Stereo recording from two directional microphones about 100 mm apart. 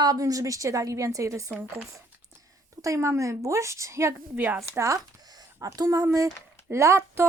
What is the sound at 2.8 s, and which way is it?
A woman's voice, 30° right (ahead or behind).